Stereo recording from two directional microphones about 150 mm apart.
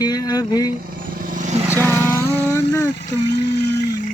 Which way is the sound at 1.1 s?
65° right (ahead or behind).